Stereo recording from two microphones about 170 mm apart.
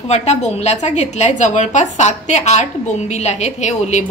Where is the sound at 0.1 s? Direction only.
40° left (ahead or behind).